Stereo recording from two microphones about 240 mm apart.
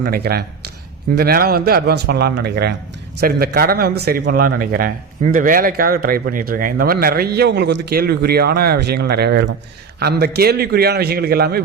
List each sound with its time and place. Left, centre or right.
0.0 s a man's voice: right